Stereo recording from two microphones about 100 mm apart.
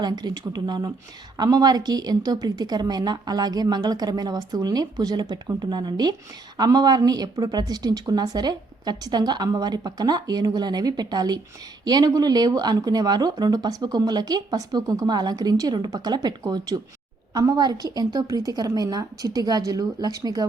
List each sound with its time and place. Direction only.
0.0 s a woman's voice: 45° right (ahead or behind)